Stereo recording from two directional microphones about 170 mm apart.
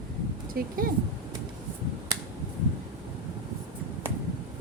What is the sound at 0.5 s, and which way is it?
Speech, 65° right (ahead or behind).